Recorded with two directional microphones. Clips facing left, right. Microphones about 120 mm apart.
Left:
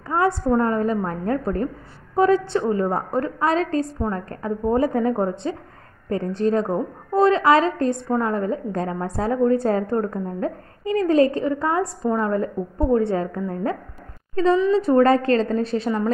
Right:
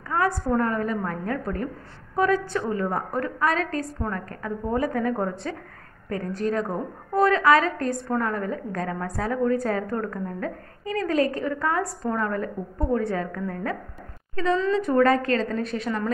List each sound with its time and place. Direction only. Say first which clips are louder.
0.1 s a woman's voice: left 4 dB; 25° left (ahead or behind)